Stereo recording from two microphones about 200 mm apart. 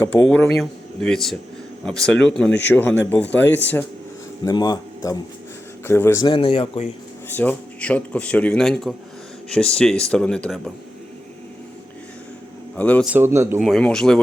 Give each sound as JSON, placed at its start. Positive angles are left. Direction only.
{"t": 0.0, "sound": "speech", "side_deg": 10}
{"t": 4.4, "sound": "speech", "side_deg": 20}
{"t": 7.3, "sound": "speech", "side_deg": 5}
{"t": 12.7, "sound": "speech", "side_deg": 5}
{"t": 13.1, "sound": "a man's voice", "side_deg": -10}
{"t": 13.6, "sound": "speech", "side_deg": 0}